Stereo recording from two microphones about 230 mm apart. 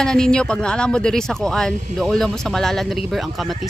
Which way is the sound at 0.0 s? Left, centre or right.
Centre.